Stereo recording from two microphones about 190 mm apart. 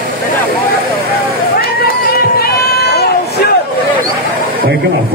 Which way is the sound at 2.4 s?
55° left (ahead or behind).